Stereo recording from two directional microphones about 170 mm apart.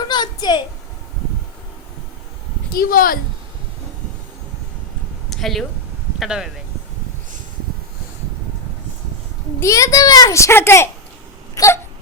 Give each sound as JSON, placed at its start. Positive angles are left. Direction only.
{"t": 0.1, "sound": "a sound", "side_deg": 25}
{"t": 2.7, "sound": "speech", "side_deg": 55}
{"t": 5.3, "sound": "speech", "side_deg": 0}
{"t": 9.6, "sound": "a child's voice", "side_deg": 20}
{"t": 11.5, "sound": "hiccup", "side_deg": 20}